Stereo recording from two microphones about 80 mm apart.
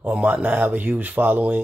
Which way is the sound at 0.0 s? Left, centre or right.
Centre.